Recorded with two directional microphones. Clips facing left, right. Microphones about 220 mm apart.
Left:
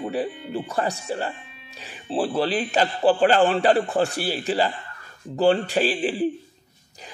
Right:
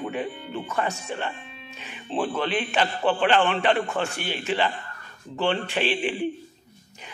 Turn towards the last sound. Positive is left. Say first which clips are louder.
# left 3 dB
turn(degrees=35)  # may be behind; listen again after turning